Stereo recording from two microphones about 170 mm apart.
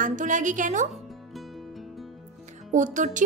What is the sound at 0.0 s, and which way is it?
Speech, 50° right (ahead or behind).